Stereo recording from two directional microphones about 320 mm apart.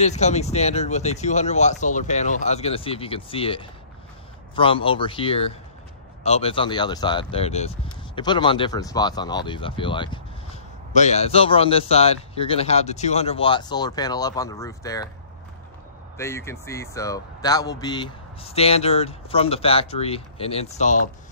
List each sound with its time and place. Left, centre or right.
0.0 s speech: left
16.2 s speech: centre